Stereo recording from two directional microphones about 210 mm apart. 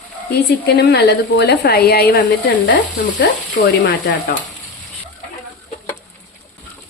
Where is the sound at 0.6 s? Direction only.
50° left (ahead or behind).